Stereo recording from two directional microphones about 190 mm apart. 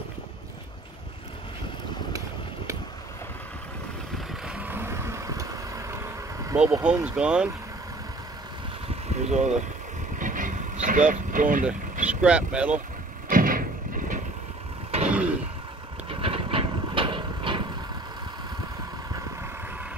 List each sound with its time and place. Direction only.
2.1 s a sound: 15° right (ahead or behind)
4.3 s vehicle: 5° right (ahead or behind)
7.2 s speech: 5° right (ahead or behind)
9.2 s vehicle: 40° right (ahead or behind)
12.1 s speech: 5° right (ahead or behind)
13.3 s a sound: 45° right (ahead or behind)
15.0 s throat clearing: 5° right (ahead or behind)
16.1 s vehicle: 30° right (ahead or behind)